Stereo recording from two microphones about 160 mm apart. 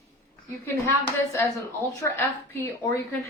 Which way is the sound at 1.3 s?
20° left (ahead or behind).